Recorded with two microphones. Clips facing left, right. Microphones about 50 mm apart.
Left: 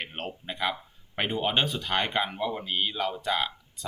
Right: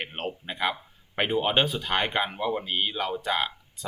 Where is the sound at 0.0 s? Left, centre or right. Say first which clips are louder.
Right 3 dB; centre.